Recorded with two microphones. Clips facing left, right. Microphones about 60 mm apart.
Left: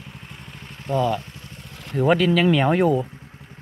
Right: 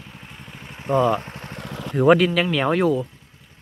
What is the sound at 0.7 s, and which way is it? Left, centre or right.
Speech, right.